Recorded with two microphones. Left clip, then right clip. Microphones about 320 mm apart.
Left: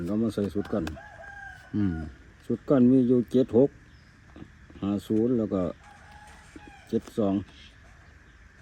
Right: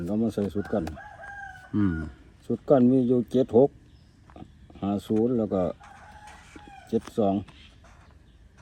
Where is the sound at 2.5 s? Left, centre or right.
Centre.